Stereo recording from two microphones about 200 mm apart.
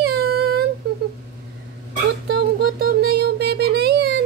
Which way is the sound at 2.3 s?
50° right (ahead or behind).